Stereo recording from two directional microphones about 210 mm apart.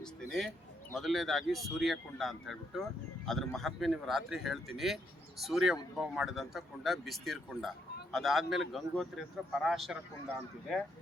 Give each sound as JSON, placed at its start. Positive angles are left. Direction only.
{"t": 0.3, "sound": "speech", "side_deg": 0}